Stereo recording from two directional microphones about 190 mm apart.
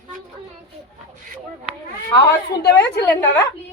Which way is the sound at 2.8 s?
15° left (ahead or behind).